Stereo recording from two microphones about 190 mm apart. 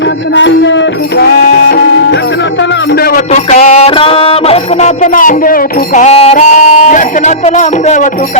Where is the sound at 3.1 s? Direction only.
35° left (ahead or behind).